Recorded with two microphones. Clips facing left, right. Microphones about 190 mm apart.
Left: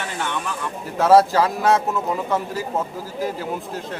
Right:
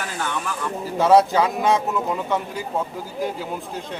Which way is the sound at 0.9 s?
Centre (ahead or behind).